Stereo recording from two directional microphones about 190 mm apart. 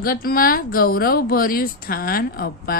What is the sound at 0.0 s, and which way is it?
A woman's voice, 50° left (ahead or behind).